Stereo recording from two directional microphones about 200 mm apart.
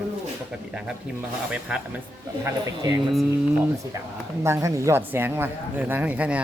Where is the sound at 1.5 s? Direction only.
5° right (ahead or behind).